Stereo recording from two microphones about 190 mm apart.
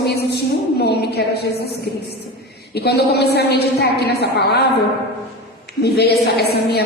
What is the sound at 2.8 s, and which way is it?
A woman's voice, 60° left (ahead or behind).